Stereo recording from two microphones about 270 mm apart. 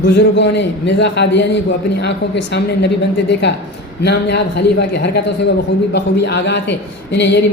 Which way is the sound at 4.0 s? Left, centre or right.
Left.